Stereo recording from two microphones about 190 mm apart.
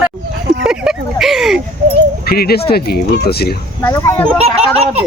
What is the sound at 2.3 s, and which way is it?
Speech, 55° left (ahead or behind).